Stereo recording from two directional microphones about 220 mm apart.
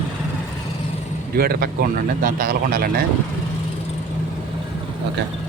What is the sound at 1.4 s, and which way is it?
Speech, 45° right (ahead or behind).